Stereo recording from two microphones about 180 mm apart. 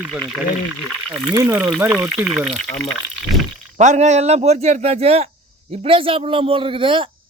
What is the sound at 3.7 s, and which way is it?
A man's voice, 40° right (ahead or behind).